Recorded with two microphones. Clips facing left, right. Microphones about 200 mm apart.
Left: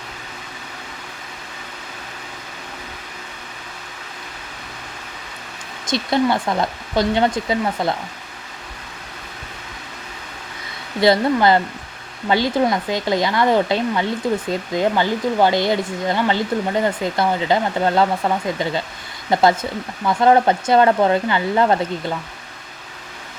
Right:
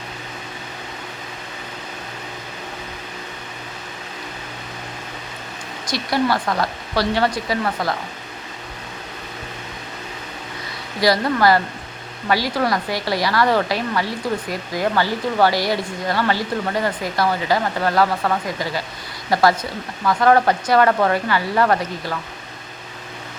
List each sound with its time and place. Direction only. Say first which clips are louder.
5.8 s speech: left 2 dB; 25° left (ahead or behind)
11.0 s speech: left 2 dB; 25° left (ahead or behind)